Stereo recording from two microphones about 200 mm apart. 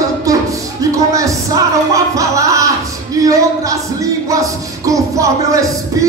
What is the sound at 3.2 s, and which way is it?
Music, 15° right (ahead or behind).